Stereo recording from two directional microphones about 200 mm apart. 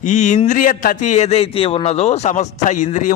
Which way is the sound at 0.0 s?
40° left (ahead or behind).